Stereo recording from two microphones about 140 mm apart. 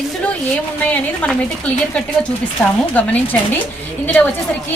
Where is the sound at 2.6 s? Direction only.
5° left (ahead or behind).